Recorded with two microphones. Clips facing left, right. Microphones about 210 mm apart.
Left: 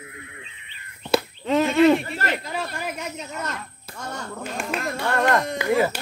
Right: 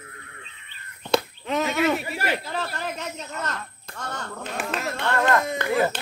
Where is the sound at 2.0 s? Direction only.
10° right (ahead or behind).